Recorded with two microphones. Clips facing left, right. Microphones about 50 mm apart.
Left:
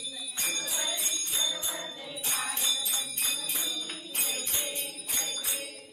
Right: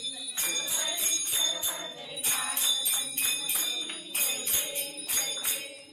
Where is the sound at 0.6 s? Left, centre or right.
Left.